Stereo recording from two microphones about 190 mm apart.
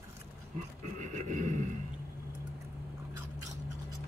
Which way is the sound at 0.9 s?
40° right (ahead or behind).